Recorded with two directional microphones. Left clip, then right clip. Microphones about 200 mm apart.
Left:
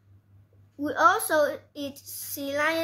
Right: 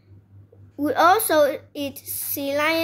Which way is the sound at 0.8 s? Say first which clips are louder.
Right 5 dB; 25° right (ahead or behind).